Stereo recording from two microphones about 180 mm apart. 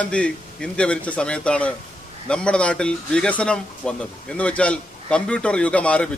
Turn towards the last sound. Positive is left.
turn(degrees=5)  # may be behind; listen again after turning